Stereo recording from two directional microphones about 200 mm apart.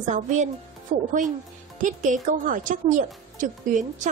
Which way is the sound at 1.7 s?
40° right (ahead or behind).